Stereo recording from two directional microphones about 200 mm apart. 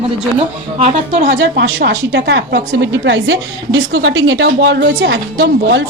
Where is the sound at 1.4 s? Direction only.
65° right (ahead or behind).